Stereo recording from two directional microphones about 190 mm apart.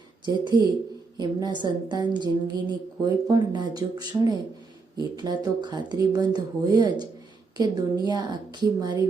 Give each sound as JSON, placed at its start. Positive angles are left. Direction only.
{"t": 0.3, "sound": "a woman's voice", "side_deg": -20}